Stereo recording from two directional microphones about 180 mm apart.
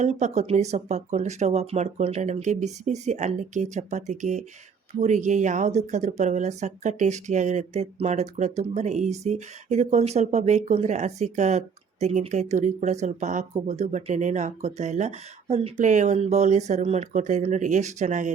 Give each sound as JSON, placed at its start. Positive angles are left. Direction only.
{"t": 0.0, "sound": "speech", "side_deg": -40}